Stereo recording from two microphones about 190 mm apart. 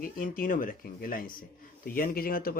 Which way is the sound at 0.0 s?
45° left (ahead or behind).